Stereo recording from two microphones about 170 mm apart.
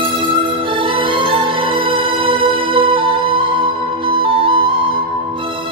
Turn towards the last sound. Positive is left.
turn(degrees=-30)  # may be behind; listen again after turning